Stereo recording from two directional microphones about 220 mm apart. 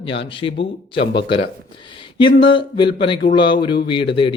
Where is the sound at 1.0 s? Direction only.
50° left (ahead or behind).